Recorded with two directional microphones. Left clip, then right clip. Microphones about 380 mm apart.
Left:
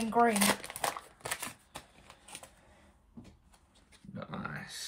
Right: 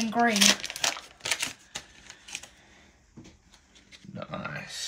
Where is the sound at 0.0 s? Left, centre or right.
Centre.